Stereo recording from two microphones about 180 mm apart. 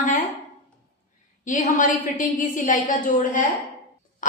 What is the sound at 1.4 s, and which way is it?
Speech, 45° left (ahead or behind).